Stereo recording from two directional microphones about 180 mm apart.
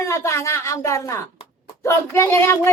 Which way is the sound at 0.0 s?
15° left (ahead or behind).